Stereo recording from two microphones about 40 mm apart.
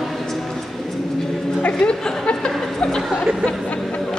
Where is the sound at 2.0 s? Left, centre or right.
Centre.